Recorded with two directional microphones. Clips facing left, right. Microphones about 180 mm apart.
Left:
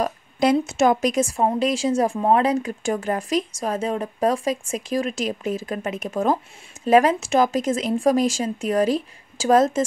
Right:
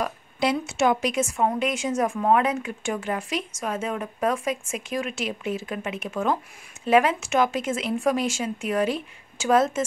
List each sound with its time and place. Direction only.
0.0 s speech: 45° left (ahead or behind)